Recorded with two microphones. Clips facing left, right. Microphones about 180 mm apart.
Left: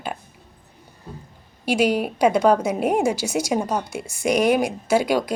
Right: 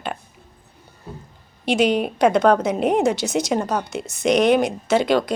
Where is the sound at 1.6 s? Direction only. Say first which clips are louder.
Right 1 dB; 10° left (ahead or behind).